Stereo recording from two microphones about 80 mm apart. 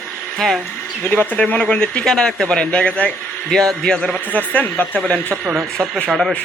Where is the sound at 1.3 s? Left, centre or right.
Centre.